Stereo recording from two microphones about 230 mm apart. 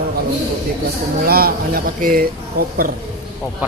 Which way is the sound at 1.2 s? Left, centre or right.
Right.